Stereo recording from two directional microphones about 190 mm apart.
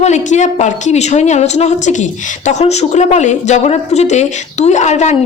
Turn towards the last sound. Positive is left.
turn(degrees=35)  # may be behind; listen again after turning